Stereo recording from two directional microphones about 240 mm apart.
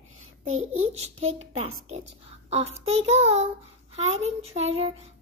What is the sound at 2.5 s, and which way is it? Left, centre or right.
A child's voice, right.